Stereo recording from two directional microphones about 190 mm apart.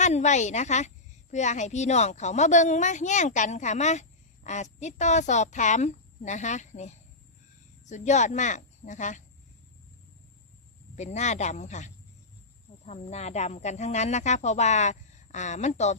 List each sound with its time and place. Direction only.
0.0 s a child's voice: 35° left (ahead or behind)
10.9 s a child's voice: 35° left (ahead or behind)